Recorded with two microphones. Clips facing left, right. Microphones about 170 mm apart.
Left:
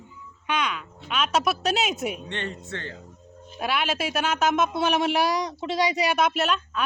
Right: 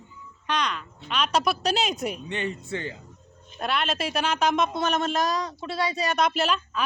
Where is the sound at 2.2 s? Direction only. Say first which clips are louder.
Right 3 dB; 10° right (ahead or behind).